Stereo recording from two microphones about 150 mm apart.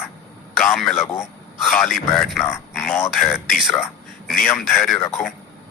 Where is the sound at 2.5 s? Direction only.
Centre (ahead or behind).